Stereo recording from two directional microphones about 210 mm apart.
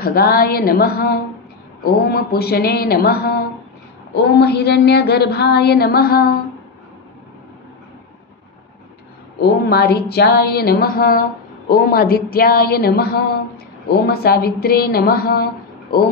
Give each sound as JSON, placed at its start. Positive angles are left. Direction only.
{"t": 0.0, "sound": "a woman's voice", "side_deg": 45}
{"t": 9.4, "sound": "a woman's voice", "side_deg": 50}